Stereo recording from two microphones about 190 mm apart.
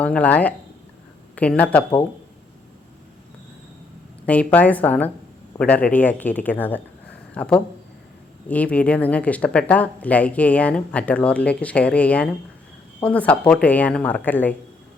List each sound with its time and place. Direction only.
0.0 s speech: 5° left (ahead or behind)
4.3 s speech: 5° left (ahead or behind)